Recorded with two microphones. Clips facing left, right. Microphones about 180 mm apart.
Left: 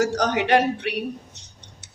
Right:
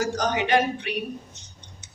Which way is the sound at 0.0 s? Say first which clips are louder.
Left 3 dB; 65° left (ahead or behind).